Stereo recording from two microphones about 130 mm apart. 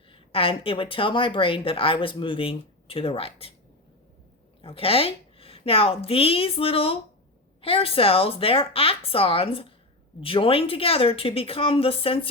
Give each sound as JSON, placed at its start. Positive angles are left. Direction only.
{"t": 0.1, "sound": "a woman's voice", "side_deg": 45}
{"t": 4.6, "sound": "a woman's voice", "side_deg": 45}